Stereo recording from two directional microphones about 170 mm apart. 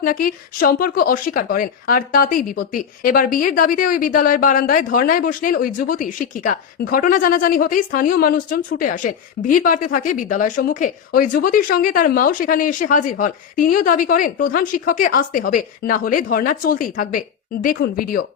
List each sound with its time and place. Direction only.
0.0 s a woman's voice: 55° left (ahead or behind)
17.7 s speech: 65° left (ahead or behind)